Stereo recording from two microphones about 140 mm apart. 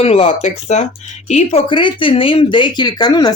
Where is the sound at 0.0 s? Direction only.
45° left (ahead or behind).